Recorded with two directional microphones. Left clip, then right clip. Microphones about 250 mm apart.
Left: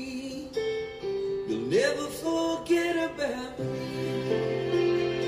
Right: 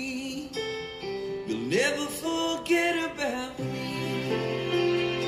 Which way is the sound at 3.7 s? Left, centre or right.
Right.